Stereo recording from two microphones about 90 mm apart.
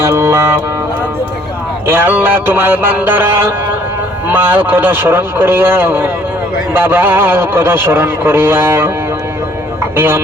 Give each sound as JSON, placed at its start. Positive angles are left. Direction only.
{"t": 0.0, "sound": "music", "side_deg": -30}
{"t": 1.9, "sound": "a man's voice", "side_deg": -20}